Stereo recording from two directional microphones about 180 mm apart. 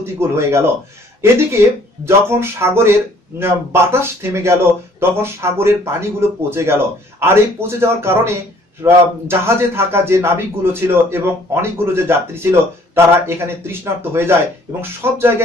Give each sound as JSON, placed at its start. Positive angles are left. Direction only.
{"t": 0.0, "sound": "a man's voice", "side_deg": -15}